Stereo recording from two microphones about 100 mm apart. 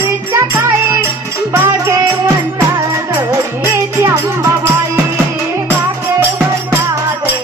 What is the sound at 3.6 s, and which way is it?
Music, 25° right (ahead or behind).